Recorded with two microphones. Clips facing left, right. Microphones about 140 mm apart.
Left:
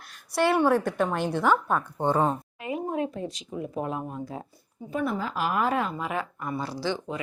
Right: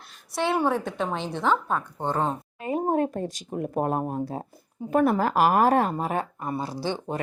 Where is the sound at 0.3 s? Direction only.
Centre (ahead or behind).